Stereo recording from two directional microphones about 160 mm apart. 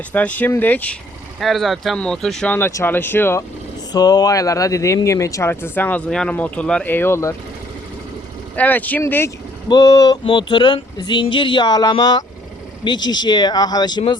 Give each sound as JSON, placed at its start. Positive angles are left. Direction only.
{"t": 0.1, "sound": "speech", "side_deg": 10}
{"t": 3.9, "sound": "speech", "side_deg": 25}
{"t": 8.5, "sound": "speech", "side_deg": 10}